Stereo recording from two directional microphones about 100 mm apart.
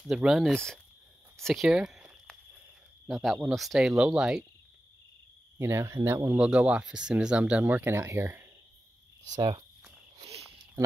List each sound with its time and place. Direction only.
0.1 s speech: 5° right (ahead or behind)
1.7 s a sound: 10° right (ahead or behind)
3.1 s speech: centre (ahead or behind)
5.6 s speech: 30° right (ahead or behind)
6.2 s speech: 15° right (ahead or behind)